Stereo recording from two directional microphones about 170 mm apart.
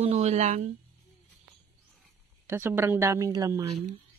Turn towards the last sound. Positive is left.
turn(degrees=-20)  # may be behind; listen again after turning